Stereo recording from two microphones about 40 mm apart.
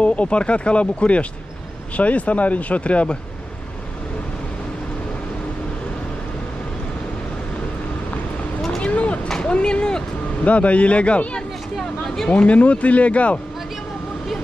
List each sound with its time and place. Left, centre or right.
0.0 s speech: left
8.8 s a sound: left
9.5 s speech: left
10.4 s speech: left